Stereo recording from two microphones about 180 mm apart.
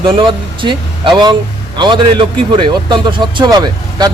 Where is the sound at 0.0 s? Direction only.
25° right (ahead or behind).